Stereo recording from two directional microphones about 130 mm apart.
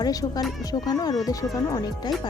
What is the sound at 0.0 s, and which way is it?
Speech, 30° left (ahead or behind).